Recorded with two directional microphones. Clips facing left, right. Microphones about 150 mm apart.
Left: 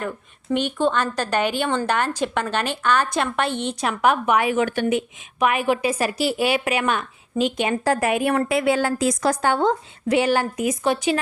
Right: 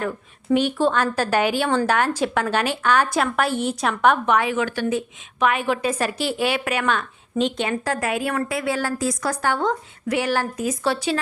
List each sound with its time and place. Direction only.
0.5 s a woman's voice: 5° right (ahead or behind)
4.7 s speech: 55° left (ahead or behind)
4.9 s a woman's voice: 10° left (ahead or behind)
7.3 s a woman's voice: 5° left (ahead or behind)
7.9 s a woman's voice: 25° left (ahead or behind)